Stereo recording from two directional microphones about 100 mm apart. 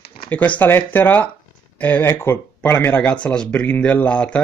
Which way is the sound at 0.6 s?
20° left (ahead or behind).